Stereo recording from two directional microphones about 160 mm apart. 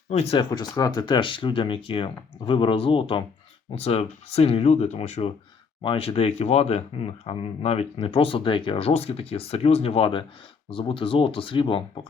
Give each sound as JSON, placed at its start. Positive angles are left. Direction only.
{"t": 0.1, "sound": "speech", "side_deg": 40}